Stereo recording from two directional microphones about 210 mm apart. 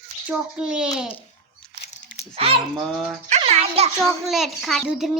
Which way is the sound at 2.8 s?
Centre (ahead or behind).